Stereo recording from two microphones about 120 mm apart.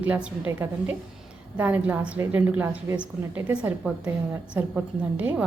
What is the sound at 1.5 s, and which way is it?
A woman's voice, 15° right (ahead or behind).